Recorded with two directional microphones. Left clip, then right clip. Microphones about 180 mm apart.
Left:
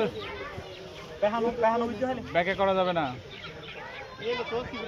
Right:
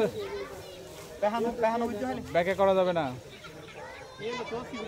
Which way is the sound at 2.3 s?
90° right.